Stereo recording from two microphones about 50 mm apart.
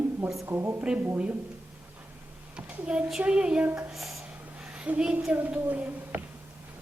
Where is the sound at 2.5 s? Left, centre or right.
Right.